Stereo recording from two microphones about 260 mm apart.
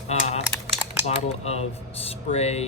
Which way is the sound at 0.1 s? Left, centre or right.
Left.